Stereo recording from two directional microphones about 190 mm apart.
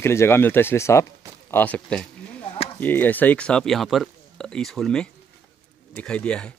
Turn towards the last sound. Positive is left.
turn(degrees=5)  # may be behind; listen again after turning